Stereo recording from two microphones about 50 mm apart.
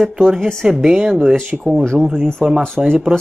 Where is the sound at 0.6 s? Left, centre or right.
Centre.